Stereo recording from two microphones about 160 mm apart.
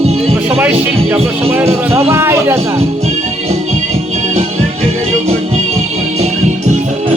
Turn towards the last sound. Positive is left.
turn(degrees=-45)  # may be behind; listen again after turning